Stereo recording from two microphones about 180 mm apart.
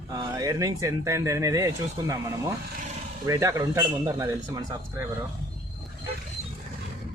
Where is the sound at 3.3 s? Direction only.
15° right (ahead or behind).